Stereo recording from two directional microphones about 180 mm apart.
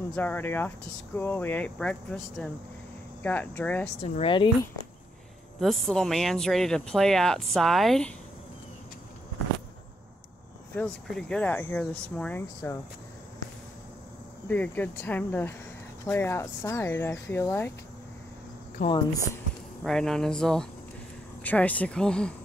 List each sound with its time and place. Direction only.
0.1 s speech: 10° left (ahead or behind)
4.2 s speech: 25° left (ahead or behind)
5.6 s speech: centre (ahead or behind)
10.7 s speech: 5° left (ahead or behind)
14.5 s speech: 10° left (ahead or behind)
18.8 s speech: 45° left (ahead or behind)
19.8 s speech: centre (ahead or behind)